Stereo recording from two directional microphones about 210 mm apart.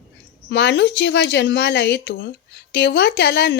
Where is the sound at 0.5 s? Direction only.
55° left (ahead or behind).